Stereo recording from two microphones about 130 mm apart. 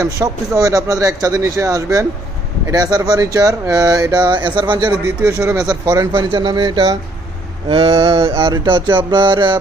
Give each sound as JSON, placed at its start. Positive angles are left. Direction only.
{"t": 0.0, "sound": "speech", "side_deg": -25}
{"t": 4.9, "sound": "speech", "side_deg": -15}
{"t": 5.5, "sound": "speech", "side_deg": -25}
{"t": 6.1, "sound": "mantra", "side_deg": -35}